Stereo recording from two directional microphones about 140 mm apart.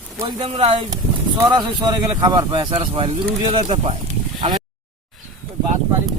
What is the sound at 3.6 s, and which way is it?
Speech, 50° right (ahead or behind).